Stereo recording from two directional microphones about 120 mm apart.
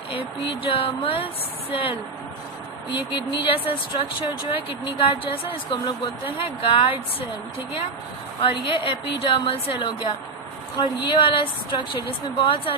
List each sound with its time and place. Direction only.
0.7 s speech: 50° left (ahead or behind)
2.9 s speech: 40° left (ahead or behind)
8.4 s speech: 45° left (ahead or behind)